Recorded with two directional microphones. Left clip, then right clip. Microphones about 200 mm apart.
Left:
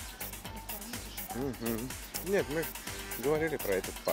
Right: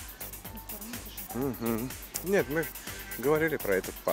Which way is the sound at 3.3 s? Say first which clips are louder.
Right 4 dB; 30° right (ahead or behind).